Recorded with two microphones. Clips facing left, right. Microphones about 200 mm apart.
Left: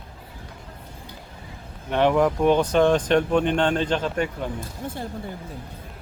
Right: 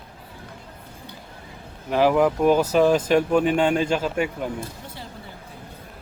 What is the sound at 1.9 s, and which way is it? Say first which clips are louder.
Speech: right 1 dB; 5° right (ahead or behind).